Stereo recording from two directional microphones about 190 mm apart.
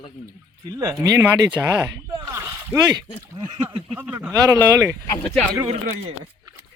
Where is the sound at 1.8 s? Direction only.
15° right (ahead or behind).